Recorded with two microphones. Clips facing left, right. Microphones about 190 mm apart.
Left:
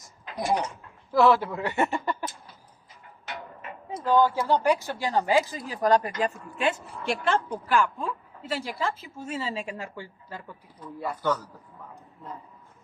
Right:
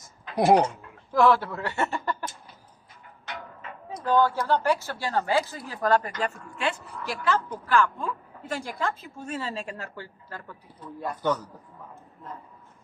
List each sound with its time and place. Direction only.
0.3 s speech: 65° right (ahead or behind)
1.1 s a woman's voice: 5° left (ahead or behind)
3.9 s a woman's voice: 10° left (ahead or behind)
7.5 s a woman's voice: 15° left (ahead or behind)